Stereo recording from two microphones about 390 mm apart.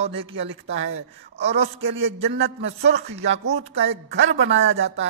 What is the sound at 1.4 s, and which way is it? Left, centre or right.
Speech, centre.